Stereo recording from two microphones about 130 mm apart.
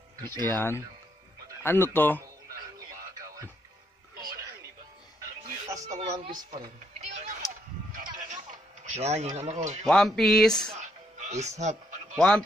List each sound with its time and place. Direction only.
0.2 s speech: 30° right (ahead or behind)
0.5 s speech: 15° left (ahead or behind)
5.9 s speech: 50° right (ahead or behind)
8.8 s speech: 60° right (ahead or behind)
9.8 s speech: 5° left (ahead or behind)
10.8 s music: 65° right (ahead or behind)
12.2 s speech: 5° left (ahead or behind)